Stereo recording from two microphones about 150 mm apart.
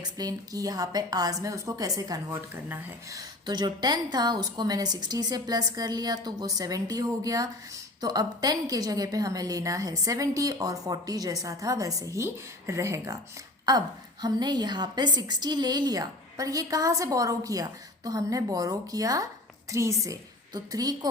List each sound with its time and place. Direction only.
0.0 s a woman's voice: 25° right (ahead or behind)